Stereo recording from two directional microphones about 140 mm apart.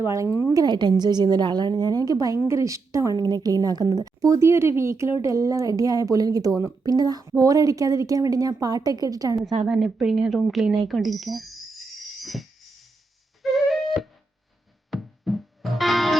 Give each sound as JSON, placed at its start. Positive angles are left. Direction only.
{"t": 0.0, "sound": "a woman's voice", "side_deg": -20}
{"t": 9.6, "sound": "speech", "side_deg": -5}
{"t": 12.2, "sound": "music", "side_deg": 0}
{"t": 13.4, "sound": "flute", "side_deg": 0}
{"t": 14.8, "sound": "music", "side_deg": 0}